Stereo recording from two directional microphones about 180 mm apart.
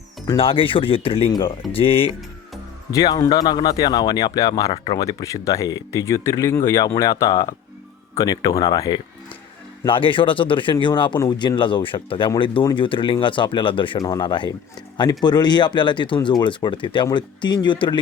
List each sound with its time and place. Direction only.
0.3 s speech: 30° left (ahead or behind)
2.9 s speech: 20° left (ahead or behind)